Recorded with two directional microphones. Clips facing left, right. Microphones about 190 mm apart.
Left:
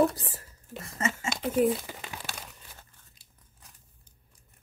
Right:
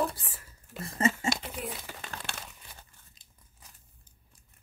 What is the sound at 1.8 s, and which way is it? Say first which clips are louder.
Crumpling: left 1 dB; 10° left (ahead or behind).